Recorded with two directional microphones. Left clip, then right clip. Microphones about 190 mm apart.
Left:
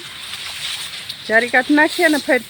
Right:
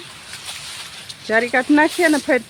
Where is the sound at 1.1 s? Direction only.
5° right (ahead or behind).